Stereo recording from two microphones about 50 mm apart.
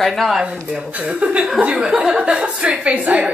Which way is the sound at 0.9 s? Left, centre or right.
Right.